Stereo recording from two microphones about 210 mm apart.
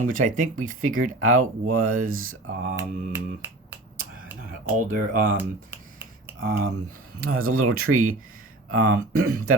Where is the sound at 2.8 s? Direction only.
10° right (ahead or behind).